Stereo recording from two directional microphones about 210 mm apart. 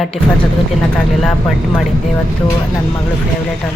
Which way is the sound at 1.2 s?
Centre (ahead or behind).